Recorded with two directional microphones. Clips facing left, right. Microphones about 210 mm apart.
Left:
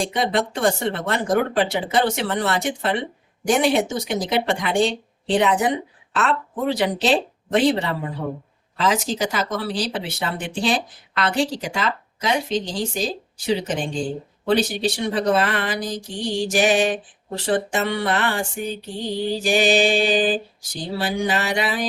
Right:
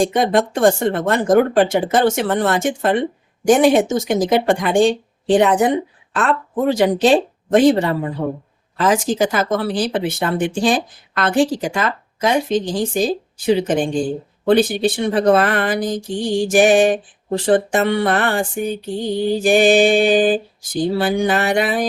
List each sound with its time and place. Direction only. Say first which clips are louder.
0.0 s speech: right 6 dB; 50° right (ahead or behind)